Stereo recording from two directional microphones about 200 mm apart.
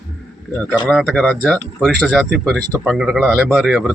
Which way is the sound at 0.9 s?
5° left (ahead or behind).